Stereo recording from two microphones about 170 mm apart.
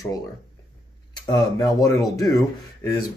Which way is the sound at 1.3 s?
20° left (ahead or behind).